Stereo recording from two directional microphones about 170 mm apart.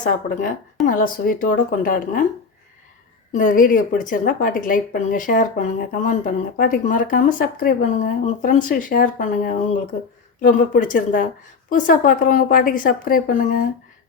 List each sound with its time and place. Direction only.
0.0 s speech: 50° left (ahead or behind)
3.3 s speech: 55° left (ahead or behind)